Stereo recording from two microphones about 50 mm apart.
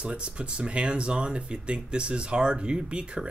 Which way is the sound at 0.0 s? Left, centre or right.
Centre.